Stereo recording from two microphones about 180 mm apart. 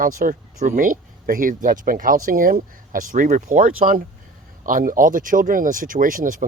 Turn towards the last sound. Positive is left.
turn(degrees=-50)  # may be behind; listen again after turning